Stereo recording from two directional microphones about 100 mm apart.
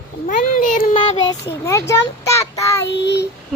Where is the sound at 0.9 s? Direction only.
55° left (ahead or behind).